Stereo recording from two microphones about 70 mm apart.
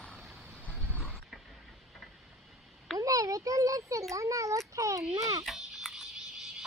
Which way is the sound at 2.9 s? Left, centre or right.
Right.